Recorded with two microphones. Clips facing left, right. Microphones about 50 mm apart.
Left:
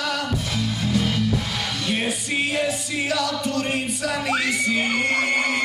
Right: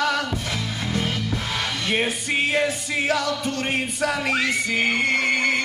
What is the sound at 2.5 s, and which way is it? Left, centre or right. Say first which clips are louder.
Music: right 2 dB; right.